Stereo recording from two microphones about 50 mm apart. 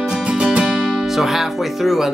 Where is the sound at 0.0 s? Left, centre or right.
Centre.